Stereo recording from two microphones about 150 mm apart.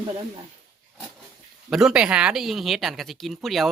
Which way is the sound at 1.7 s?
5° right (ahead or behind).